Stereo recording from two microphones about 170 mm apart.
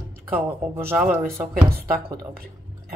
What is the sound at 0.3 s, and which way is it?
Speech, 10° right (ahead or behind).